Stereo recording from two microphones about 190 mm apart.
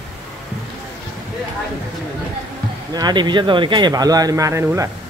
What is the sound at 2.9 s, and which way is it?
Speech, 20° right (ahead or behind).